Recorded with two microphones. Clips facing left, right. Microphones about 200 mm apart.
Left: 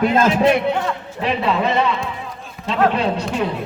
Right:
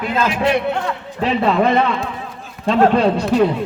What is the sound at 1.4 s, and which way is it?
Speech, 50° right (ahead or behind).